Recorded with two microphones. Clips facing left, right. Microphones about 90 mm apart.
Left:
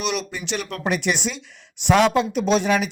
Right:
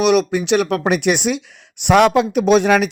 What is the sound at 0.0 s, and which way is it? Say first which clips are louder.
Speech: right 12 dB; 60° right (ahead or behind).